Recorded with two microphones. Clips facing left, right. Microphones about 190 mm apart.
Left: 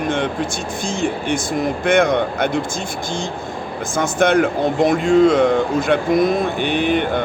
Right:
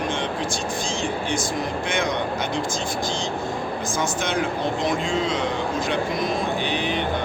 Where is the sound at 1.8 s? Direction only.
55° left (ahead or behind).